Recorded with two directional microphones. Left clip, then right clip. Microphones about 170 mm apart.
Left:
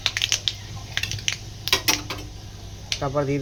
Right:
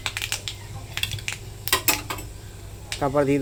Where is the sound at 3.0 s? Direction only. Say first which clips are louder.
Right 4 dB; 50° right (ahead or behind).